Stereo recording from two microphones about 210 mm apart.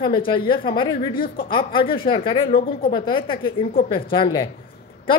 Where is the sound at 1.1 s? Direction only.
45° left (ahead or behind).